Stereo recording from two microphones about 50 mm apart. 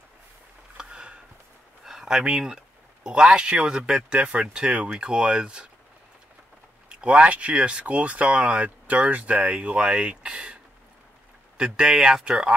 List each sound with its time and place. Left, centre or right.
0.7 s a sound: centre
1.9 s speech: centre
6.9 s speech: centre